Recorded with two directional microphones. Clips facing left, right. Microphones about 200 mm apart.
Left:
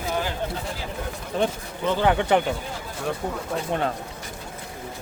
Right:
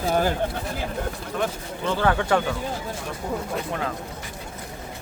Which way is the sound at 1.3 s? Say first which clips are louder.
Left 4 dB; 30° left (ahead or behind).